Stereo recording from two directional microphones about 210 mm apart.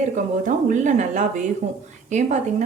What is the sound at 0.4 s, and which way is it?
Speech, 35° right (ahead or behind).